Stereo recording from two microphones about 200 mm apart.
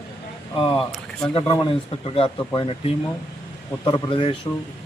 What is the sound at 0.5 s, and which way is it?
Speech, 25° left (ahead or behind).